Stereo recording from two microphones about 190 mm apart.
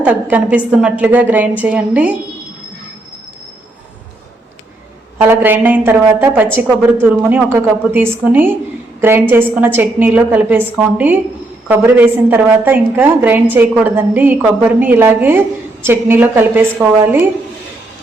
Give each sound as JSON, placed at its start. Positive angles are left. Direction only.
{"t": 0.0, "sound": "a woman's voice", "side_deg": -10}
{"t": 5.1, "sound": "a woman's voice", "side_deg": -10}